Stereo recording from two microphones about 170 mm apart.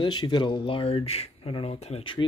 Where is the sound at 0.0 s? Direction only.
25° left (ahead or behind).